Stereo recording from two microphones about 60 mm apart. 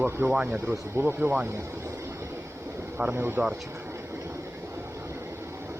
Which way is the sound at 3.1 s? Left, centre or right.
Right.